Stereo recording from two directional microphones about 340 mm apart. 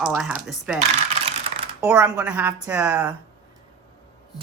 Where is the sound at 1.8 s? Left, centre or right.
Centre.